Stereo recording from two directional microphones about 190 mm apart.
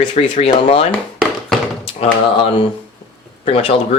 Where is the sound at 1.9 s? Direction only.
30° left (ahead or behind).